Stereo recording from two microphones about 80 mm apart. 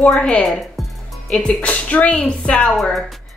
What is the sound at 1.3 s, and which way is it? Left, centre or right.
Speech, centre.